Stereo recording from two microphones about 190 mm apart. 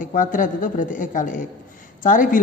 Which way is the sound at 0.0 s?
45° left (ahead or behind).